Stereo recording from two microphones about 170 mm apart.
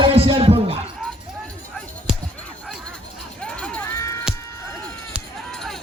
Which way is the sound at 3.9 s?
15° left (ahead or behind).